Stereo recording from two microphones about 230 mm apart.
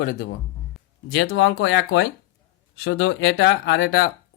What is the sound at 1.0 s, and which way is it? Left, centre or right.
Speech, left.